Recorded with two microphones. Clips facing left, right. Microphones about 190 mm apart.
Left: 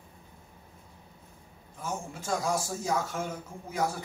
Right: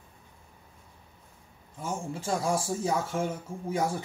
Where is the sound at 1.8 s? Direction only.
30° right (ahead or behind).